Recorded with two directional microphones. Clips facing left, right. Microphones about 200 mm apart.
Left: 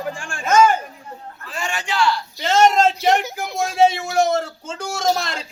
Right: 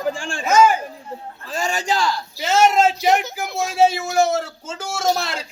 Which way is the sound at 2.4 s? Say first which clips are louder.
Left 1 dB; 5° right (ahead or behind).